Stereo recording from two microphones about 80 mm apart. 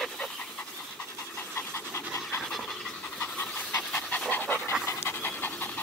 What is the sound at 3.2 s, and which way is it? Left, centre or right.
Pant, left.